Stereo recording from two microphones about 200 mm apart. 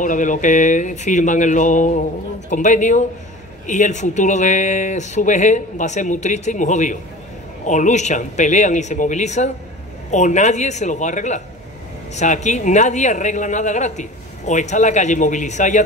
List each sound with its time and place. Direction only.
0.0 s speech: 40° left (ahead or behind)